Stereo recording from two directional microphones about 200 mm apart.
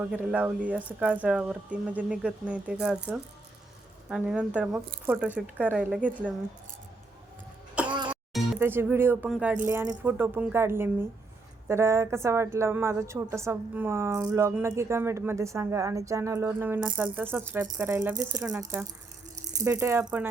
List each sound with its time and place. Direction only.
0.0 s a woman's voice: 10° right (ahead or behind)
7.9 s music: 20° right (ahead or behind)
8.1 s a woman's voice: 10° right (ahead or behind)
19.6 s a woman's voice: 15° right (ahead or behind)